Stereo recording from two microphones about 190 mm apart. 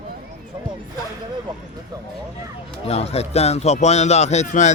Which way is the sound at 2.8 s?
30° left (ahead or behind).